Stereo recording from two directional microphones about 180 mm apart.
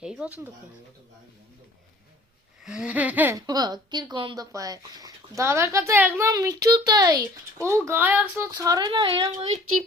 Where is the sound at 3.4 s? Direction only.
20° right (ahead or behind).